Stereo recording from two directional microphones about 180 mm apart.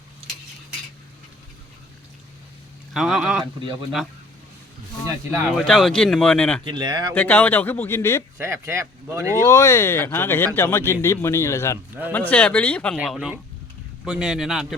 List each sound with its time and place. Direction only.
2.9 s speech: 5° right (ahead or behind)
5.5 s speech: centre (ahead or behind)
6.7 s speech: 25° right (ahead or behind)
7.1 s speech: 10° left (ahead or behind)
8.4 s speech: 15° right (ahead or behind)
9.4 s speech: 15° left (ahead or behind)
12.0 s speech: 10° right (ahead or behind)
12.3 s speech: 10° left (ahead or behind)